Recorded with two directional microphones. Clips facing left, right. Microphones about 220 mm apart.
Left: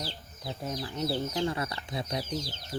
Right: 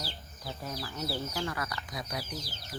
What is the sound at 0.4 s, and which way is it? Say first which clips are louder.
Speech: left 4 dB; 20° left (ahead or behind).